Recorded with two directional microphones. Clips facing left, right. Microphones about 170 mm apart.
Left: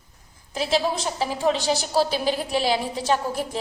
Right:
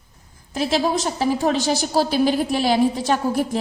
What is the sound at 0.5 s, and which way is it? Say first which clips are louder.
A woman's voice: right 3 dB; 45° right (ahead or behind).